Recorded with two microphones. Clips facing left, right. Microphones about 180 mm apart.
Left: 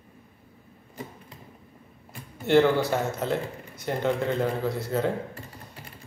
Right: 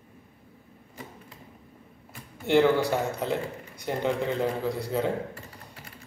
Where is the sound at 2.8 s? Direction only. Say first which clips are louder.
Even; 15° right (ahead or behind).